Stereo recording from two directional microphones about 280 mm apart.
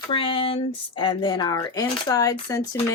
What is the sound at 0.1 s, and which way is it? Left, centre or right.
Speech, centre.